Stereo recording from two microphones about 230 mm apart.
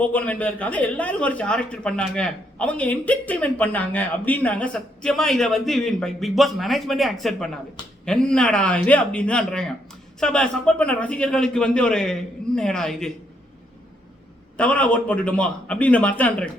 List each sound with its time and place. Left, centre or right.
0.0 s a man's voice: centre
14.5 s a man's voice: centre